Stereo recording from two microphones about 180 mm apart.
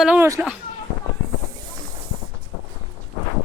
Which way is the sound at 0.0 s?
5° right (ahead or behind).